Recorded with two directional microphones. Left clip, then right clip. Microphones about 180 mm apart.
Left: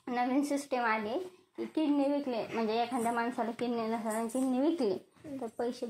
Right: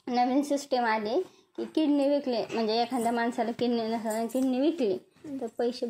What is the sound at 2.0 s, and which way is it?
A woman's voice, 20° right (ahead or behind).